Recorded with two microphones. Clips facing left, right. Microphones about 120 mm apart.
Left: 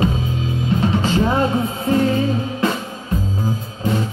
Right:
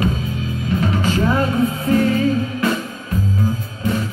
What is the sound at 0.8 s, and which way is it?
Music, 30° left (ahead or behind).